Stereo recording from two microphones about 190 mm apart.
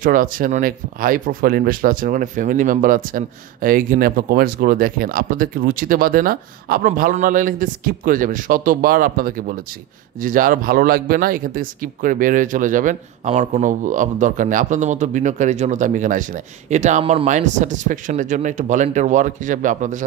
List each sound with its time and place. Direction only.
0.0 s speech: 45° right (ahead or behind)